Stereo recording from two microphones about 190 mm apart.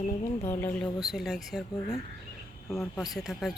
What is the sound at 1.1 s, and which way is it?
Speech, centre (ahead or behind).